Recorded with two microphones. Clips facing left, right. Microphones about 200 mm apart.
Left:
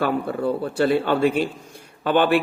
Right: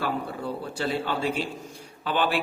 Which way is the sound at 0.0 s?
60° left (ahead or behind).